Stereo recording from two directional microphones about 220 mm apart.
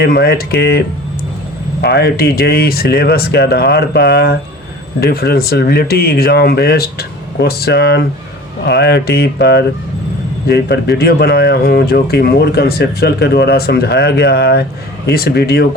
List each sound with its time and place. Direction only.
0.0 s speech: 45° left (ahead or behind)